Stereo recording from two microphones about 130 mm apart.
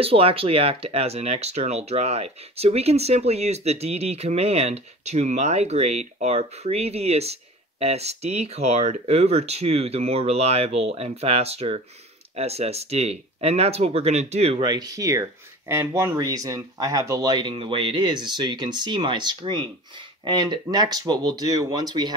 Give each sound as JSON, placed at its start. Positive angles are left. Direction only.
{"t": 0.0, "sound": "speech", "side_deg": -45}
{"t": 14.6, "sound": "speech", "side_deg": -35}